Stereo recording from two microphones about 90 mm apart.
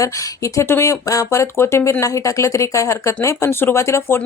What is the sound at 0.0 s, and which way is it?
Speech, 35° left (ahead or behind).